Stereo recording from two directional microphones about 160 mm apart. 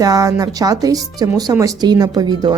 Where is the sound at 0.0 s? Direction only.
20° right (ahead or behind).